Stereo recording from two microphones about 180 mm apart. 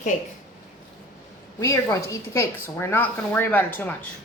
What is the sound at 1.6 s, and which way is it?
A woman's voice, 15° left (ahead or behind).